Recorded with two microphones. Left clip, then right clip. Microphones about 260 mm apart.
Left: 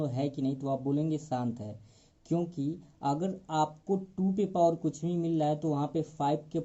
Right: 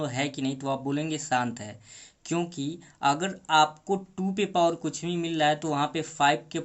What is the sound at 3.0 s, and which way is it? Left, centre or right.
Speech, right.